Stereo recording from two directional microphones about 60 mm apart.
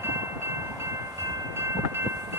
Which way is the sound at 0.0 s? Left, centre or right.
Right.